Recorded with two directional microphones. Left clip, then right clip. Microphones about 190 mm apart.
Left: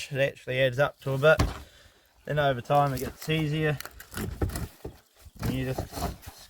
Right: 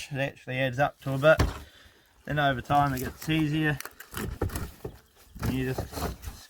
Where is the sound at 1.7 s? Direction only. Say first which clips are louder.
Right 1 dB; 65° left (ahead or behind).